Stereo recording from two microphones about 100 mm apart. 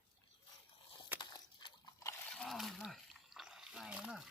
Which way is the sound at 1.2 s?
50° left (ahead or behind).